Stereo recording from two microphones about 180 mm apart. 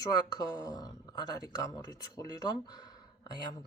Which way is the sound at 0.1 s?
20° left (ahead or behind).